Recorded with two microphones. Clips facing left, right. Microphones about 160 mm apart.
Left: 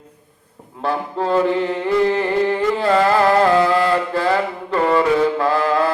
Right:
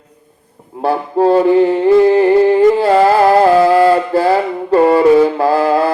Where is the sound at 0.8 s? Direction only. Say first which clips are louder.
Right 8 dB; 35° right (ahead or behind).